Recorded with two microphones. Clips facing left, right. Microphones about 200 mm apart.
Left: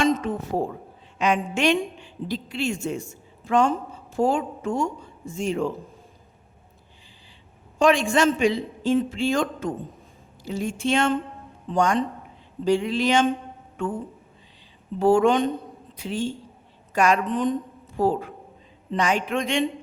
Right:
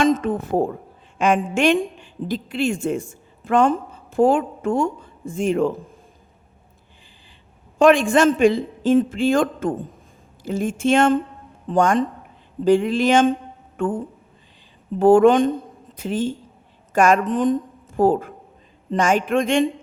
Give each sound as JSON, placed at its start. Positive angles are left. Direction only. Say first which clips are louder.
{"t": 0.0, "sound": "a woman's voice", "louder": "right 4 dB", "side_deg": -50}
{"t": 7.8, "sound": "speech", "louder": "right 5 dB", "side_deg": -55}
{"t": 14.9, "sound": "a woman's voice", "louder": "right 6 dB", "side_deg": -55}